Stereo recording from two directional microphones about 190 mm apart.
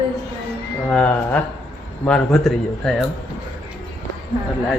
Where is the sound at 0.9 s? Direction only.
10° left (ahead or behind).